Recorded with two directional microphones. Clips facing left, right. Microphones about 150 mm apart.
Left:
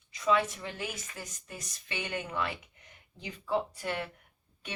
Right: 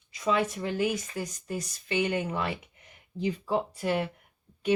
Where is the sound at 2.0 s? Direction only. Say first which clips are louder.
Right 5 dB; 35° right (ahead or behind).